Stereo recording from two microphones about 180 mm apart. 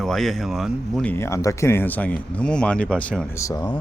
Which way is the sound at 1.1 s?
15° left (ahead or behind).